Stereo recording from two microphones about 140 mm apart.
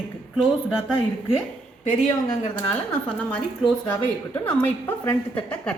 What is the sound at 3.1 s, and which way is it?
A woman's voice, 5° left (ahead or behind).